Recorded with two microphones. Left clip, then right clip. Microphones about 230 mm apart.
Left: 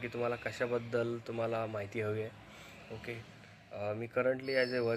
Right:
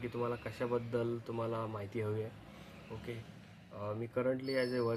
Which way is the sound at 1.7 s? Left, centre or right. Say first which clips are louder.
Left 3 dB; centre.